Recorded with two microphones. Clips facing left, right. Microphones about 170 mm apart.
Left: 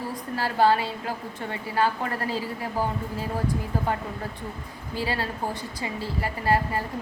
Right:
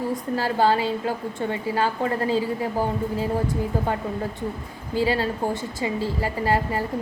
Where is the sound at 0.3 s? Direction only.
25° right (ahead or behind).